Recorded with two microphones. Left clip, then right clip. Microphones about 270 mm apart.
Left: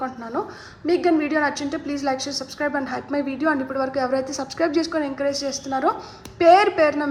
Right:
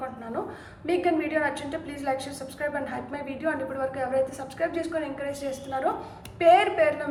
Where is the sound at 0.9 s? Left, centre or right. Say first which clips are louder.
Left 5 dB; centre.